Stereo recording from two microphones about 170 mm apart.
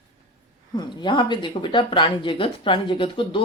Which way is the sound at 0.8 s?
25° left (ahead or behind).